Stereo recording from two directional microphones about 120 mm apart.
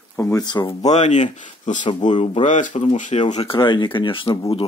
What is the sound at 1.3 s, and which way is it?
Speech, 90° left.